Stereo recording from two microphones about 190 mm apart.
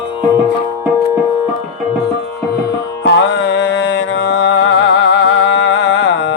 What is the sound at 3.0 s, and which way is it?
Music, 65° left (ahead or behind).